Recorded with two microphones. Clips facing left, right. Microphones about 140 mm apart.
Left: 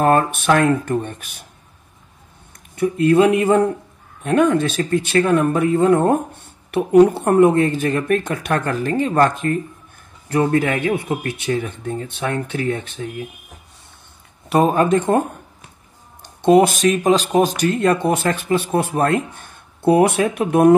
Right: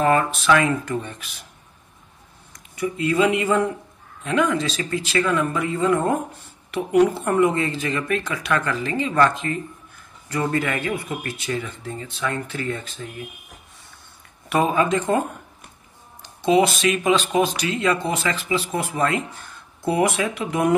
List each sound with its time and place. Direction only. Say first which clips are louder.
0.0 s speech: left 3 dB; 55° left (ahead or behind)
2.7 s a man's voice: left 8 dB; 60° left (ahead or behind)
14.5 s speech: left 5 dB; 40° left (ahead or behind)
16.4 s speech: left 5 dB; 50° left (ahead or behind)